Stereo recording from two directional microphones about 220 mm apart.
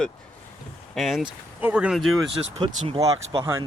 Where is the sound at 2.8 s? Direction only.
25° right (ahead or behind).